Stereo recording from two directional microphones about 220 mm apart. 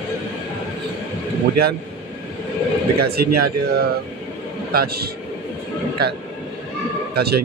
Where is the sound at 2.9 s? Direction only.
45° right (ahead or behind).